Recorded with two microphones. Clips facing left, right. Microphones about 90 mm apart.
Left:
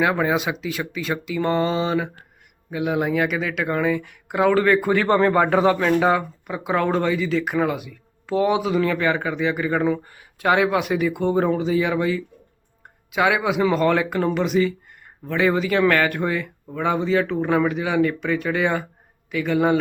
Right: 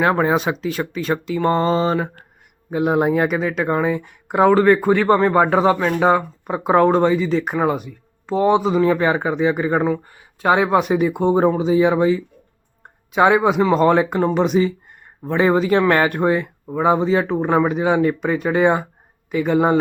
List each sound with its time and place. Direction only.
0.0 s speech: 30° right (ahead or behind)
3.7 s speech: 15° right (ahead or behind)
3.9 s speech: 35° right (ahead or behind)
4.4 s speech: 20° right (ahead or behind)
4.9 s speech: 15° right (ahead or behind)
6.1 s speech: 35° right (ahead or behind)
7.9 s speech: 20° right (ahead or behind)
8.9 s speech: 35° right (ahead or behind)
9.9 s speech: 10° right (ahead or behind)
11.3 s speech: 25° right (ahead or behind)
13.1 s speech: 40° right (ahead or behind)